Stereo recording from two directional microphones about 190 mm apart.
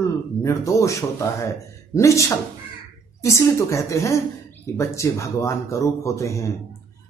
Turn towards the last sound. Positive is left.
turn(degrees=15)  # may be behind; listen again after turning